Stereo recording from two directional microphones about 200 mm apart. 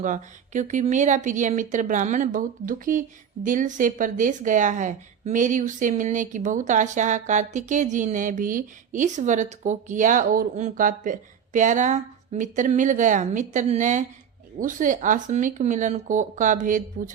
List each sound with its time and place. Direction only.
0.0 s speech: 40° right (ahead or behind)